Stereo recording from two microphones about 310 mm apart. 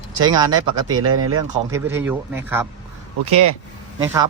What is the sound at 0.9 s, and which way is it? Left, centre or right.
Speech, right.